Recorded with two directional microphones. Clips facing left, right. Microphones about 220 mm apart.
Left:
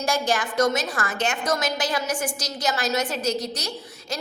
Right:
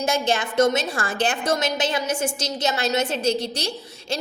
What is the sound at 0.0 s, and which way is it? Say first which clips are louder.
A woman's voice: right 2 dB; 25° right (ahead or behind).